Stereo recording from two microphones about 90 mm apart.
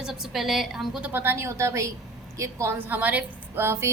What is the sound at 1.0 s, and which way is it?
A woman's voice, 25° right (ahead or behind).